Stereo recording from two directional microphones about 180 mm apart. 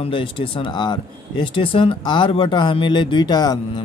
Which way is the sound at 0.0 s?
30° left (ahead or behind).